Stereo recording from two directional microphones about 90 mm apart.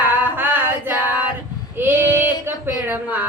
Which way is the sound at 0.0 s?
20° right (ahead or behind).